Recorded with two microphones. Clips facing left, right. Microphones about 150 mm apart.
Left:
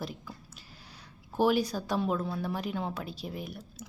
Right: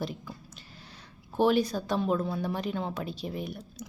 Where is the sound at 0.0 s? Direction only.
Centre (ahead or behind).